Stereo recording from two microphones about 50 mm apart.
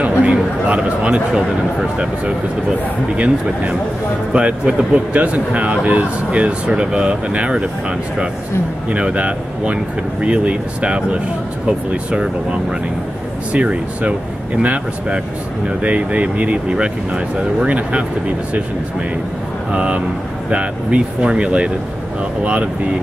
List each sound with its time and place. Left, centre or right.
0.0 s speech: right
4.3 s speech: right
8.9 s speech: right
13.5 s speech: right
17.6 s speech: right
19.7 s speech: right